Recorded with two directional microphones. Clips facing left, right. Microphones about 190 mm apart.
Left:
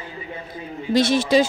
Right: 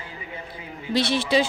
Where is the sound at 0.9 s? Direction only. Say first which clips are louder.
Left 5 dB; 45° left (ahead or behind).